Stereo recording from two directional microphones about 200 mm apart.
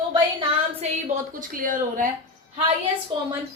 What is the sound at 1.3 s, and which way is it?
Speech, 45° right (ahead or behind).